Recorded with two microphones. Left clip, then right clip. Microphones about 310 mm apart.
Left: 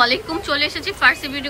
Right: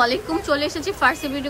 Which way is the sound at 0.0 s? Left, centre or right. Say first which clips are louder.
Left 2 dB; centre.